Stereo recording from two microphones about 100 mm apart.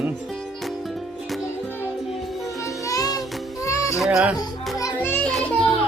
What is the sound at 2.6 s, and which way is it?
Music, 35° left (ahead or behind).